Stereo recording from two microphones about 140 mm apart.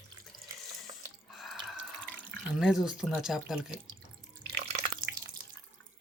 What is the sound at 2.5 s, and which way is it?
Speech, 5° right (ahead or behind).